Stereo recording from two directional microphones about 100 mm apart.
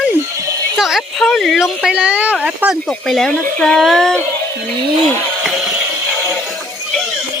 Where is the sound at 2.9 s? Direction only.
5° left (ahead or behind).